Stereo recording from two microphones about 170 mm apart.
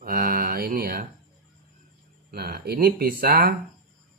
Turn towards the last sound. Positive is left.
turn(degrees=-60)  # may be behind; listen again after turning